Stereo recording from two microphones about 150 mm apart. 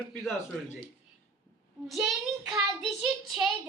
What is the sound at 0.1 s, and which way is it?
Speech, centre (ahead or behind).